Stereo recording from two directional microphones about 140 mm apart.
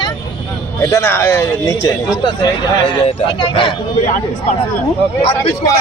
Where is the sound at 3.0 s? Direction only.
40° left (ahead or behind).